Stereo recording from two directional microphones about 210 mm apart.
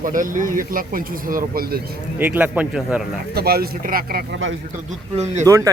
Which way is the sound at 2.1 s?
10° right (ahead or behind).